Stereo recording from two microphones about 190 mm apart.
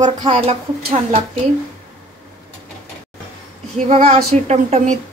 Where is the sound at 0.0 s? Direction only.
25° right (ahead or behind).